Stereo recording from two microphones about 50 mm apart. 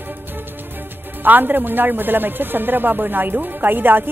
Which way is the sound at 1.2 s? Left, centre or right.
Right.